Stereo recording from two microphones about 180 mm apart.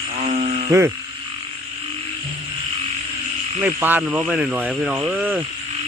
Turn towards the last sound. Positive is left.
turn(degrees=-10)  # may be behind; listen again after turning